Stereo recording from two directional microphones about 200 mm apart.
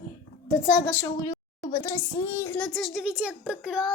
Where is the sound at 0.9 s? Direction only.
15° left (ahead or behind).